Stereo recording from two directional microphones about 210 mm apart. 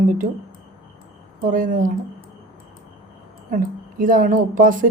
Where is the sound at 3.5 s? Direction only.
40° right (ahead or behind).